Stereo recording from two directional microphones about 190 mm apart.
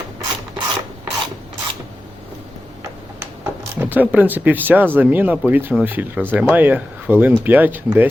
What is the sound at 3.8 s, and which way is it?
Speech, 10° right (ahead or behind).